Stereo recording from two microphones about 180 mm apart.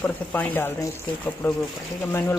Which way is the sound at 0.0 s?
10° left (ahead or behind).